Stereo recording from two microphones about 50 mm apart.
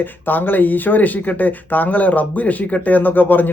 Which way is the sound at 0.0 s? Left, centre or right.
Left.